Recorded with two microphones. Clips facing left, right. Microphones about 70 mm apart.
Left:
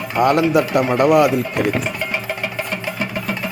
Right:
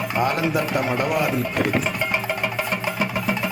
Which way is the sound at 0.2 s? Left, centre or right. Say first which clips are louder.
Left 8 dB; left.